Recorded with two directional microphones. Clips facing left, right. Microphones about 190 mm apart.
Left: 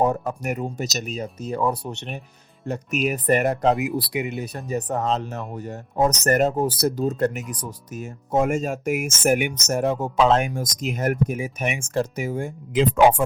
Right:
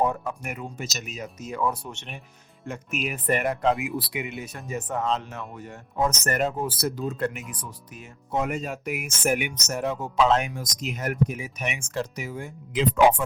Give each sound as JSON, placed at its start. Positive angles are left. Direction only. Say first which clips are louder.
{"t": 0.0, "sound": "speech", "louder": "left 4 dB", "side_deg": 40}